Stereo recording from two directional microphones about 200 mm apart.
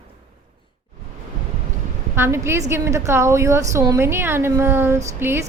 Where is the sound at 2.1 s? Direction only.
10° right (ahead or behind).